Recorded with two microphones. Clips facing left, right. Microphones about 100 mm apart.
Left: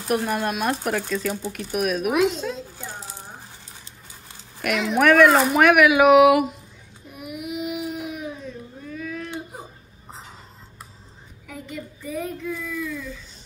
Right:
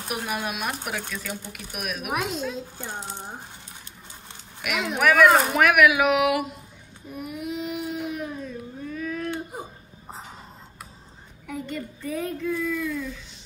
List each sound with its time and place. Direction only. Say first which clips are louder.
0.1 s speech: left 7 dB; 5° right (ahead or behind)
2.8 s speech: right 2 dB; 20° right (ahead or behind)
4.6 s speech: left 5 dB; 5° right (ahead or behind)
7.1 s baby cry: right 1 dB; 10° left (ahead or behind)
11.4 s a woman's voice: right 3 dB; centre (ahead or behind)